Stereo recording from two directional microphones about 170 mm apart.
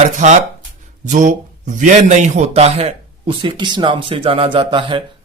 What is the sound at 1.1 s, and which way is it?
A man's voice, 45° right (ahead or behind).